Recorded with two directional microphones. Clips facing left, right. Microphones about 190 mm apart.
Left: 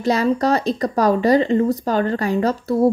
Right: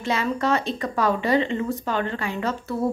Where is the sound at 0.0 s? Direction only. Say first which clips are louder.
Left 7 dB; 40° left (ahead or behind).